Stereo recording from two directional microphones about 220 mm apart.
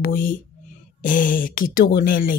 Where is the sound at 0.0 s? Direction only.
40° left (ahead or behind).